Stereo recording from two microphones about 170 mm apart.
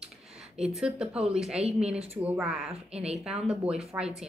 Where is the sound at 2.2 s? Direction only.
5° right (ahead or behind).